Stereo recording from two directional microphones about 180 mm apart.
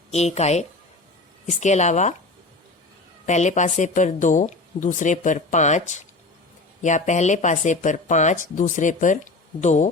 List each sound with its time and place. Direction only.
0.1 s a woman's voice: 35° left (ahead or behind)
3.2 s a woman's voice: 40° left (ahead or behind)